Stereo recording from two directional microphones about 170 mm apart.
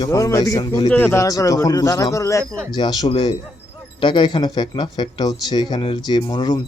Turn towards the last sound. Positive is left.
turn(degrees=25)  # may be behind; listen again after turning